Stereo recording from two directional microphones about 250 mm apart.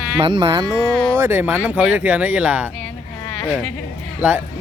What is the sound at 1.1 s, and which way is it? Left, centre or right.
Speech, centre.